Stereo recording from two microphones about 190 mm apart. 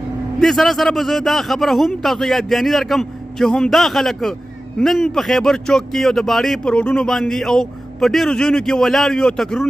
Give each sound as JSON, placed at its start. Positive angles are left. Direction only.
{"t": 0.4, "sound": "a man's voice", "side_deg": 0}